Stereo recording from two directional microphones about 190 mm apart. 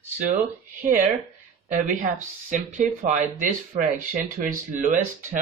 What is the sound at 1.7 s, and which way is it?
Speech, 40° right (ahead or behind).